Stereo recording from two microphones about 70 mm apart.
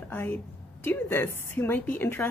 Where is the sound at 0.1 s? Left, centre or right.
Left.